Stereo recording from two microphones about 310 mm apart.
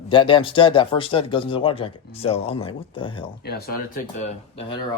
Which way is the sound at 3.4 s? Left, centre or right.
Left.